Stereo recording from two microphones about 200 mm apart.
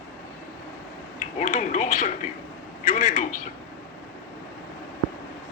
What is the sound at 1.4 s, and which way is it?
Speech, 40° left (ahead or behind).